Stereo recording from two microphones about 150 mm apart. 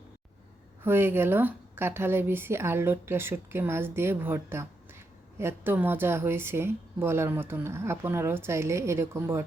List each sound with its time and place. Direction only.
0.9 s a woman's voice: 15° right (ahead or behind)